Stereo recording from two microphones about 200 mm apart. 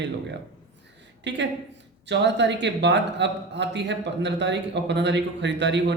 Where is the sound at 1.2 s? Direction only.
60° right (ahead or behind).